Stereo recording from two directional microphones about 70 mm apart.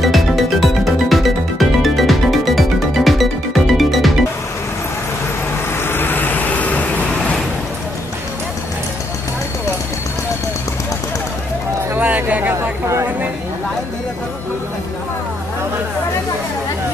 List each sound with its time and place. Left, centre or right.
0.0 s music: centre
5.9 s vehicle: left
11.9 s a sound: right